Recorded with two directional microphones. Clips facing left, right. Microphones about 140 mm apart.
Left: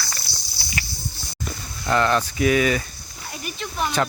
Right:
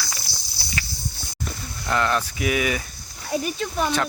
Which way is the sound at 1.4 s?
Centre (ahead or behind).